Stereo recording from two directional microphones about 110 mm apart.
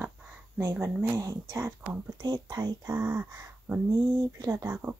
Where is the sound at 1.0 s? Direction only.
30° right (ahead or behind).